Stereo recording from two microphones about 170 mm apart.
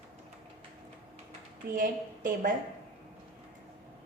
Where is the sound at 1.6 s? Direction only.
55° right (ahead or behind).